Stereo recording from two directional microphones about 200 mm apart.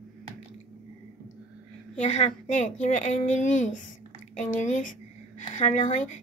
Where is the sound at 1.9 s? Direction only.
35° left (ahead or behind).